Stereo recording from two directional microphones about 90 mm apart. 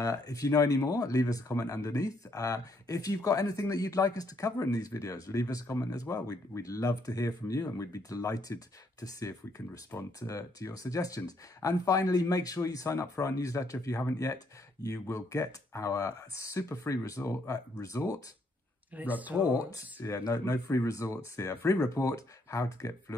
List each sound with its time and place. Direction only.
0.0 s speech: 40° left (ahead or behind)
9.9 s speech: 25° left (ahead or behind)
10.2 s speech: 40° left (ahead or behind)
18.9 s speech: 20° right (ahead or behind)
19.5 s speech: 40° left (ahead or behind)